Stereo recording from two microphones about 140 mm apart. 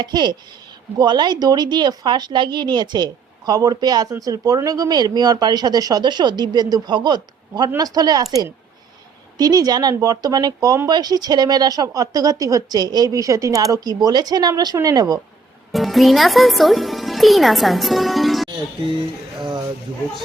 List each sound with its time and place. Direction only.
0.0 s a woman's voice: 30° right (ahead or behind)
15.7 s speech: centre (ahead or behind)
19.4 s speech: 35° right (ahead or behind)